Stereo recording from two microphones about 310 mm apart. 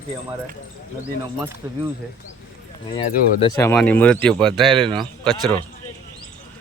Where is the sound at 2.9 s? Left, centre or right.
Centre.